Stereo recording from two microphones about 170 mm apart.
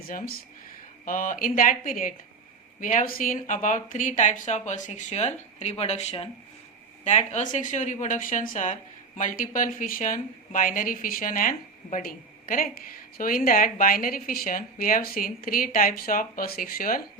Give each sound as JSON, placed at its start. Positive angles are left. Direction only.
{"t": 1.0, "sound": "a woman's voice", "side_deg": 50}